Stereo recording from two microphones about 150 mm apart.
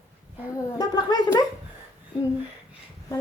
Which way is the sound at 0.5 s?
25° left (ahead or behind).